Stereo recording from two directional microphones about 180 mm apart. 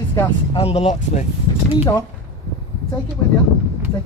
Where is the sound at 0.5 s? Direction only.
30° left (ahead or behind).